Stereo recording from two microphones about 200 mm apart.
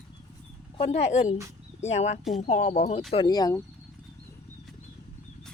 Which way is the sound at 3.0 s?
25° left (ahead or behind).